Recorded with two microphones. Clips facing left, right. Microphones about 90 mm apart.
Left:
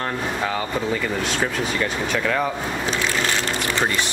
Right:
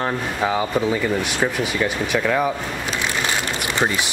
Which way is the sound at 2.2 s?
5° right (ahead or behind).